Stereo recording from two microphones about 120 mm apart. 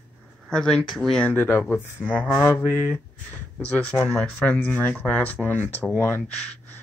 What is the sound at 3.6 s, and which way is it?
Speech, 10° left (ahead or behind).